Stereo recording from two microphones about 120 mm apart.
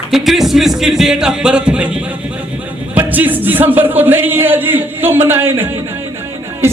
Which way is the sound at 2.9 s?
15° right (ahead or behind).